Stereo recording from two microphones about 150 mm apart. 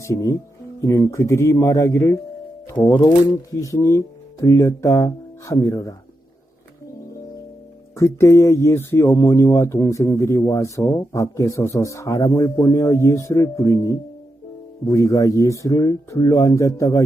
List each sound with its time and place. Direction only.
0.0 s speech: 20° left (ahead or behind)
7.9 s speech: 20° left (ahead or behind)